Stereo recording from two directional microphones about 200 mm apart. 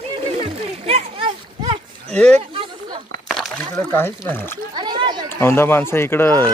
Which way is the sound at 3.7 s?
10° left (ahead or behind).